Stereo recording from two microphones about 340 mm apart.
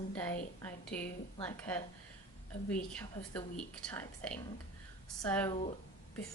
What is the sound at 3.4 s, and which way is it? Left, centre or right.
A woman's voice, centre.